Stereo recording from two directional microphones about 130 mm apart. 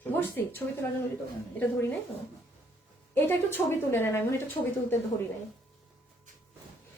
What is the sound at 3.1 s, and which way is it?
A woman's voice, 15° left (ahead or behind).